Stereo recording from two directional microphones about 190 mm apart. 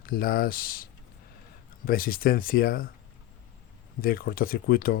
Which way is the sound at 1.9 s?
50° left (ahead or behind).